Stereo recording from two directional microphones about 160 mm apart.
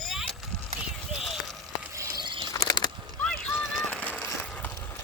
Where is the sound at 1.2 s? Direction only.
Centre (ahead or behind).